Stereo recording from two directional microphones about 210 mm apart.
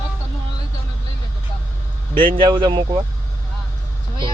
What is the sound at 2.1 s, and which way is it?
Speech, 40° right (ahead or behind).